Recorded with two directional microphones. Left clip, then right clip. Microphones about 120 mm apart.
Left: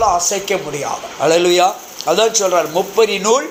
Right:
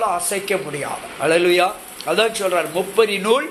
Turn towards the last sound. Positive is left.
turn(degrees=0)  # may be behind; listen again after turning